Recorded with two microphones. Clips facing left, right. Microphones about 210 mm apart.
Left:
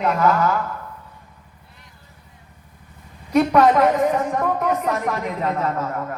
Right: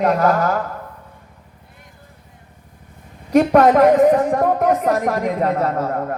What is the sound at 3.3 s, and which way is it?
A woman's voice, 50° right (ahead or behind).